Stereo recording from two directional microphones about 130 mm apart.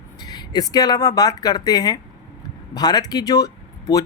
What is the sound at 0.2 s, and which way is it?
Speech, 30° left (ahead or behind).